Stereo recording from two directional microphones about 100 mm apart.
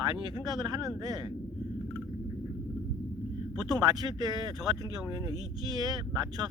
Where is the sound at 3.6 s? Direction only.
40° right (ahead or behind).